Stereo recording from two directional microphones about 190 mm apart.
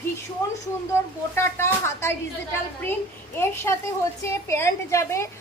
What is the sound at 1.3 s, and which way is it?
Speech, 15° left (ahead or behind).